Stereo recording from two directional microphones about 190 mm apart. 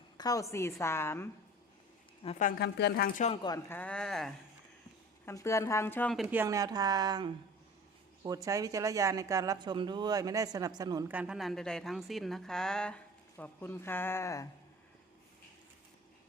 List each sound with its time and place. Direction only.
0.2 s a woman's voice: 20° left (ahead or behind)
2.2 s speech: 35° left (ahead or behind)
2.6 s speech: 60° left (ahead or behind)
3.2 s speech: 25° left (ahead or behind)
3.7 s a woman's voice: 5° left (ahead or behind)
5.2 s speech: 15° left (ahead or behind)
6.2 s speech: 15° right (ahead or behind)
11.1 s a woman's voice: 5° right (ahead or behind); by 14.4 s 15° left (ahead or behind)